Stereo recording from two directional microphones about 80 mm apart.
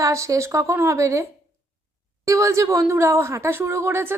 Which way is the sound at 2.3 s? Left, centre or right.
Right.